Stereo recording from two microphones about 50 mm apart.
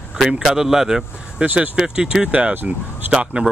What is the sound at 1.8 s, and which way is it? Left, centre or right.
Speech, centre.